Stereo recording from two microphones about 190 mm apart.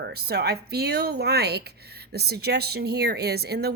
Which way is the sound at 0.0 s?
60° right (ahead or behind).